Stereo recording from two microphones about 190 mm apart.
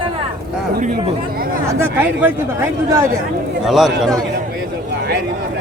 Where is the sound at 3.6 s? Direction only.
Centre (ahead or behind).